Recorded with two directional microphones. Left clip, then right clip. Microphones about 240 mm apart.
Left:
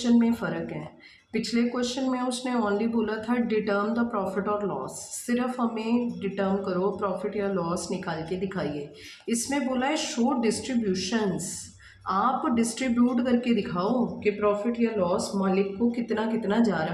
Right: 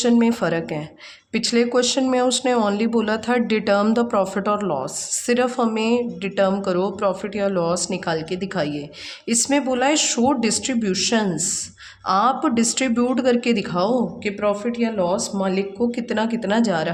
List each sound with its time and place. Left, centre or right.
0.0 s speech: right